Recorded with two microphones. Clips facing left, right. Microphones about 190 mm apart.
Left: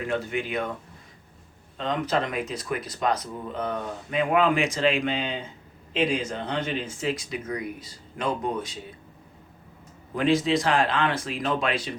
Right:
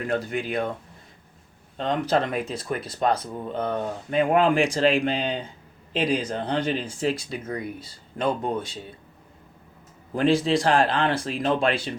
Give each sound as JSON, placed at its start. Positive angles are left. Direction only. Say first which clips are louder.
{"t": 0.1, "sound": "speech", "louder": "right 2 dB", "side_deg": -40}
{"t": 1.8, "sound": "speech", "louder": "right 3 dB", "side_deg": -35}
{"t": 10.2, "sound": "speech", "louder": "right 2 dB", "side_deg": -35}